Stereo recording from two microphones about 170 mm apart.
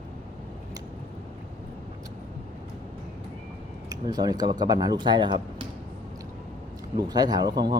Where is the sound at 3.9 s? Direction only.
25° right (ahead or behind).